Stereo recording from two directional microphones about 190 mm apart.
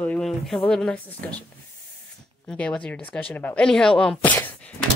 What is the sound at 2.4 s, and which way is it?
A woman's voice, 5° left (ahead or behind).